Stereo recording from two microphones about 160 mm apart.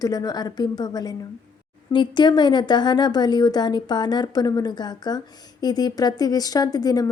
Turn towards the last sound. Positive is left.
turn(degrees=25)  # may be behind; listen again after turning